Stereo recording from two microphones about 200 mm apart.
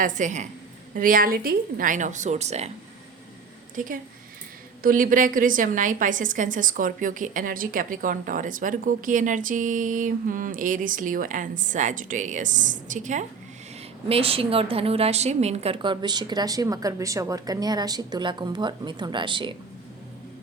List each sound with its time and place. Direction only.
0.0 s a woman's voice: 35° right (ahead or behind)
3.8 s a woman's voice: 45° right (ahead or behind); by 19.5 s 25° right (ahead or behind)